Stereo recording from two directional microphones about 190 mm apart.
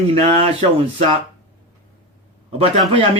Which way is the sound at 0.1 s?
30° right (ahead or behind).